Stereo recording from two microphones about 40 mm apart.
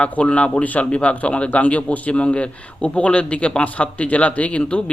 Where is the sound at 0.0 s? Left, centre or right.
Left.